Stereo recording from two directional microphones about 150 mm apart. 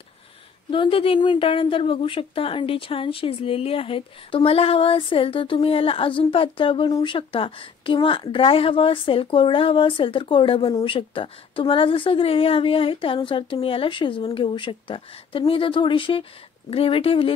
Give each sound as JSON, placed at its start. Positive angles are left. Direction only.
{"t": 0.7, "sound": "speech", "side_deg": 35}